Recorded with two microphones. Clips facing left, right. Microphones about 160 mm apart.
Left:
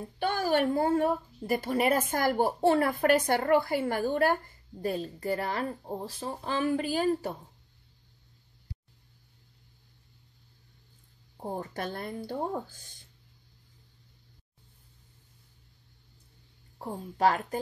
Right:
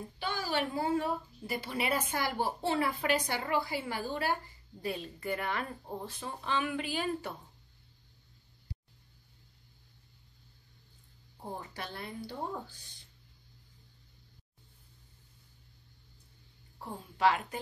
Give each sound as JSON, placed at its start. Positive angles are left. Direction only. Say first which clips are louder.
{"t": 0.2, "sound": "speech", "louder": "left 7 dB", "side_deg": 50}
{"t": 4.8, "sound": "speech", "louder": "left 5 dB", "side_deg": 40}
{"t": 11.3, "sound": "speech", "louder": "left 7 dB", "side_deg": 45}
{"t": 16.7, "sound": "speech", "louder": "left 6 dB", "side_deg": 45}